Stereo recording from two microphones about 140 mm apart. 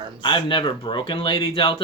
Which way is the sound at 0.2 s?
35° left (ahead or behind).